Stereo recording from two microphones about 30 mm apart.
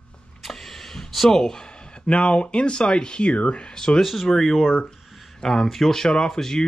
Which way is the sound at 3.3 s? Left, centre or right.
Left.